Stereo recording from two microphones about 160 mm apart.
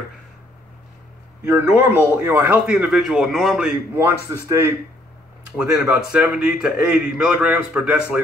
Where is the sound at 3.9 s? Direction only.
15° right (ahead or behind).